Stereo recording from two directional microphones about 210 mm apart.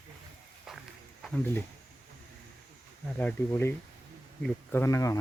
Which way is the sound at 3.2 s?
5° left (ahead or behind).